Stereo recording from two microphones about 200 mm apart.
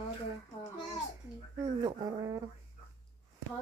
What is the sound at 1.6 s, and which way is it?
Speech, 20° right (ahead or behind).